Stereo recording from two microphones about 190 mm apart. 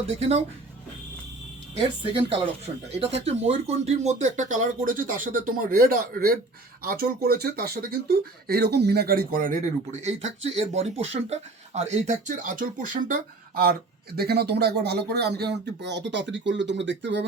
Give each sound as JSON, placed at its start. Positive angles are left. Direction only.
{"t": 0.1, "sound": "speech", "side_deg": -30}
{"t": 1.8, "sound": "speech", "side_deg": -30}
{"t": 10.0, "sound": "speech", "side_deg": -35}
{"t": 14.2, "sound": "speech", "side_deg": -55}